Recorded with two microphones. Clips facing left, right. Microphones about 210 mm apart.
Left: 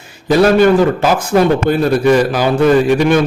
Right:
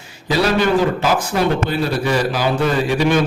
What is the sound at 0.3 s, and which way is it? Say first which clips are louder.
A man's voice: left 7 dB; 50° left (ahead or behind).